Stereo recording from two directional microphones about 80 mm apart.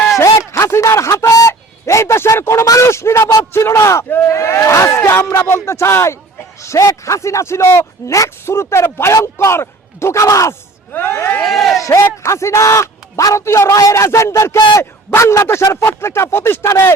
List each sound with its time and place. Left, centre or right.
0.5 s a sound: left
3.5 s battle cry: left
6.6 s a man's voice: left
10.9 s crowd: left
11.4 s speech: centre
11.8 s a man's voice: left